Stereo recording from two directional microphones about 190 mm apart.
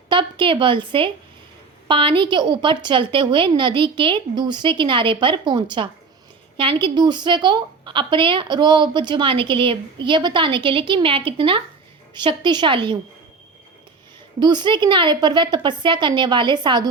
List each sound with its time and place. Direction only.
0.1 s a woman's voice: 25° right (ahead or behind)
14.3 s speech: 25° right (ahead or behind)